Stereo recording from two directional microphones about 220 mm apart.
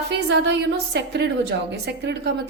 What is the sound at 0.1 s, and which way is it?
A woman's voice, 50° right (ahead or behind).